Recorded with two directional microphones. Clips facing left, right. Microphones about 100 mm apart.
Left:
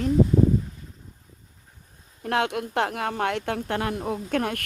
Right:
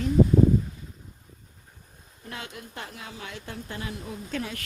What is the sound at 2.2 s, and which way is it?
Speech, 70° left (ahead or behind).